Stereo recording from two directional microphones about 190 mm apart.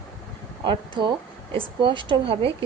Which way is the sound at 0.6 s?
25° right (ahead or behind).